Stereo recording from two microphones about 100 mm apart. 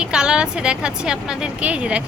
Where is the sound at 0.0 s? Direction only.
10° right (ahead or behind).